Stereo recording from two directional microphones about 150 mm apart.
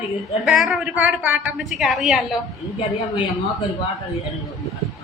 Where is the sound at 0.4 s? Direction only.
Centre (ahead or behind).